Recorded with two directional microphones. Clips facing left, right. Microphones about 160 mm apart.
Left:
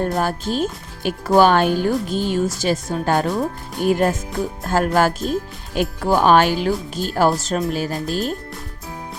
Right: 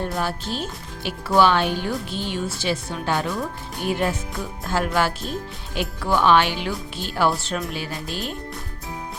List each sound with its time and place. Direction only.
0.0 s speech: 45° left (ahead or behind)